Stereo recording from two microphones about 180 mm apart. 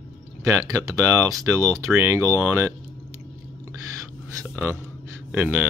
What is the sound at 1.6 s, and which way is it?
Speech, 15° right (ahead or behind).